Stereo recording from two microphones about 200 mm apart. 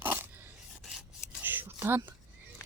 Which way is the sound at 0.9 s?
10° right (ahead or behind).